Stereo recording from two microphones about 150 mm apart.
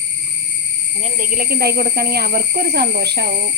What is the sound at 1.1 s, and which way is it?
Speech, 65° right (ahead or behind).